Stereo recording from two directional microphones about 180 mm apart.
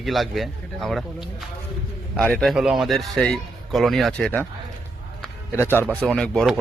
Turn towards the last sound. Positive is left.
turn(degrees=0)  # may be behind; listen again after turning